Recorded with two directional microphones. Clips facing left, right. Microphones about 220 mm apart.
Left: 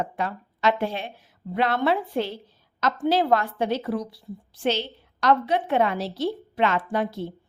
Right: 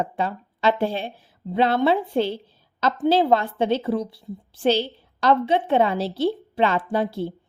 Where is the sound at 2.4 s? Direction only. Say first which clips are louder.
Right 2 dB; 30° right (ahead or behind).